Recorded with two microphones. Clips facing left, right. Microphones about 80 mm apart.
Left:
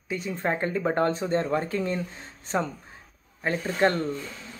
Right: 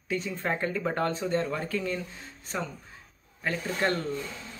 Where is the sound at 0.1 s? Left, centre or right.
Centre.